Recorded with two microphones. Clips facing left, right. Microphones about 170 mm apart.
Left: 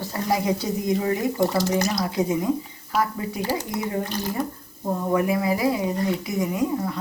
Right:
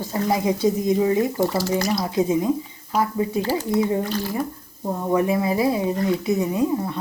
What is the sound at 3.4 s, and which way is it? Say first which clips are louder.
Speech: right 5 dB; 15° left (ahead or behind).